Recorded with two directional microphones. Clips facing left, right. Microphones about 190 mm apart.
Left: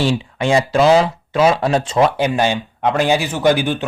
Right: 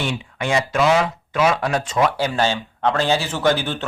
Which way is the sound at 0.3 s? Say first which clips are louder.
Left 4 dB; 30° left (ahead or behind).